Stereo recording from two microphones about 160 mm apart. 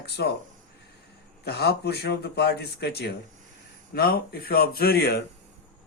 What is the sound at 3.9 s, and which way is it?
Speech, 70° left (ahead or behind).